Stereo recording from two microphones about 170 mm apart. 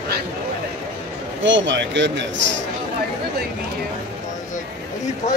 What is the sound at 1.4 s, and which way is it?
Speech, 90° right.